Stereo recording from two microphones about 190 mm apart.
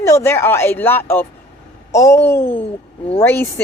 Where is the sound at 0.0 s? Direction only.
15° left (ahead or behind).